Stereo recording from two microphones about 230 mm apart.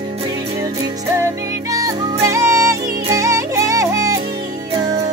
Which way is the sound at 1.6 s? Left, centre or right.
Centre.